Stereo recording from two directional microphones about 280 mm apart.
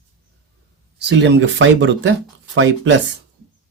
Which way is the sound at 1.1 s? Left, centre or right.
Right.